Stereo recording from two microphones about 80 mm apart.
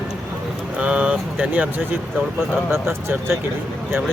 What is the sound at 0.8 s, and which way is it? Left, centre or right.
Speech, centre.